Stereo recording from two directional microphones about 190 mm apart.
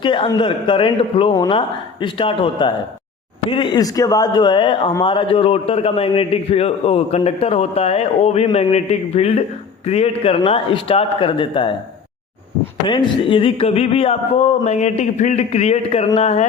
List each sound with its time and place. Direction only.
0.0 s speech: 25° left (ahead or behind)
12.9 s speech: 25° left (ahead or behind)